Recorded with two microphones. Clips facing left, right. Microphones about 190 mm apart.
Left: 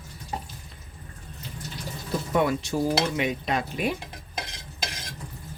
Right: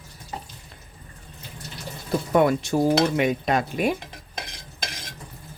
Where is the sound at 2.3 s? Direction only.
50° right (ahead or behind).